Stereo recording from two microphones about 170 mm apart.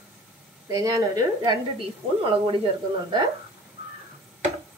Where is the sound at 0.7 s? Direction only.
20° right (ahead or behind).